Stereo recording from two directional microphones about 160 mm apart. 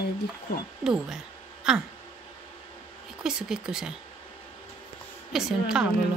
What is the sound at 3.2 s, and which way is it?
Speech, 5° right (ahead or behind).